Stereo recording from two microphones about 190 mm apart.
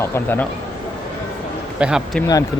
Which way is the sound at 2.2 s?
20° left (ahead or behind).